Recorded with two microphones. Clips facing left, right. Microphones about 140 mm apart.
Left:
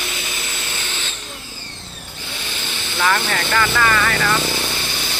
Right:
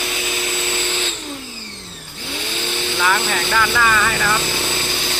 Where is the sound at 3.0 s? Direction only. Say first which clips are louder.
Left 1 dB; 5° right (ahead or behind).